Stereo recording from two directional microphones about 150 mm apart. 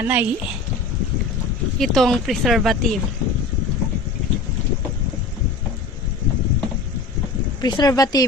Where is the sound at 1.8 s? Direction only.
Centre (ahead or behind).